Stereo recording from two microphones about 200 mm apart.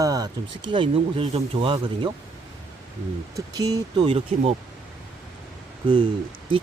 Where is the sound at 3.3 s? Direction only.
20° right (ahead or behind).